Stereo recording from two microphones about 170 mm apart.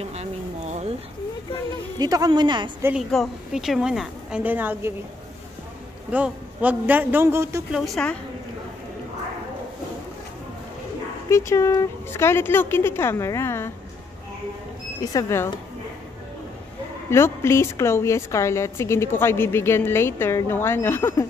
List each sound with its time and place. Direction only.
0.0 s a sound: 40° right (ahead or behind)
2.0 s speech: 20° right (ahead or behind)
2.8 s a woman's voice: 5° right (ahead or behind)
6.1 s a man's voice: 10° right (ahead or behind)
7.7 s a woman's voice: centre (ahead or behind)
11.2 s a woman's voice: 15° left (ahead or behind)
15.0 s a woman's voice: 20° left (ahead or behind)
17.1 s a woman's voice: 15° left (ahead or behind)